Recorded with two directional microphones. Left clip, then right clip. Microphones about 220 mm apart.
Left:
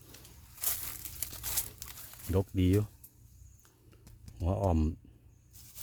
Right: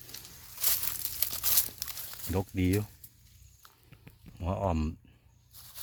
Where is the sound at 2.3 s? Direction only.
20° left (ahead or behind).